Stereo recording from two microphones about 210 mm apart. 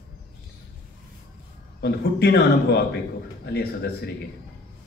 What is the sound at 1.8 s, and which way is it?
A man's voice, 50° left (ahead or behind).